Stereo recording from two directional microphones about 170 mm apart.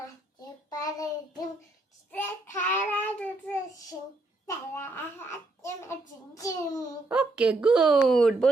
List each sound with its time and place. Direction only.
0.7 s child singing: 20° left (ahead or behind)
2.1 s child singing: 10° left (ahead or behind)
4.4 s a sound: 15° left (ahead or behind)
7.1 s speech: 5° right (ahead or behind)